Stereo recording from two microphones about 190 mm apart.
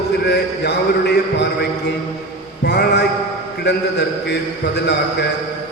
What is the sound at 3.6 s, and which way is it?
Speech, 60° left (ahead or behind).